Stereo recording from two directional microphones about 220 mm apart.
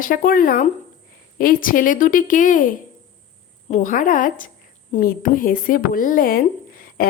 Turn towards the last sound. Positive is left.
turn(degrees=40)  # may be behind; listen again after turning